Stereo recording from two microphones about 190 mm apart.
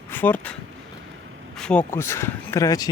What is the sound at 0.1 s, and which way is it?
Speech, 10° left (ahead or behind).